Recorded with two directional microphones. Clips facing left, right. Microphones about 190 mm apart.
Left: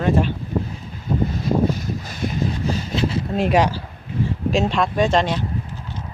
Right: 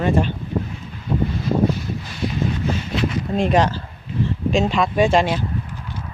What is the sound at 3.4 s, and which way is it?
Speech, 10° left (ahead or behind).